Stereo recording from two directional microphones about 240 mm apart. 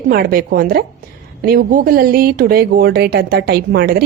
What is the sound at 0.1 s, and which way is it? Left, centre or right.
Speech, right.